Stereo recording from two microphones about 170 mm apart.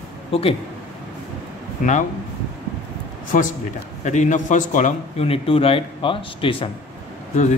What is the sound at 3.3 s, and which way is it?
A man's voice, 50° left (ahead or behind).